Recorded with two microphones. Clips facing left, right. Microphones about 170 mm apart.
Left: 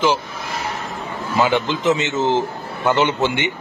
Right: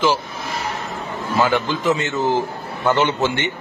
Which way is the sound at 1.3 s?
20° left (ahead or behind).